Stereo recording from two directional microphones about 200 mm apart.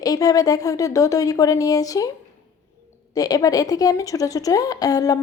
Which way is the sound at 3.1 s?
20° left (ahead or behind).